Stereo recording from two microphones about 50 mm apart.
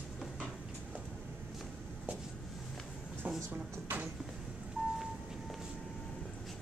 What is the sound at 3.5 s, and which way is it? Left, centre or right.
Speech, right.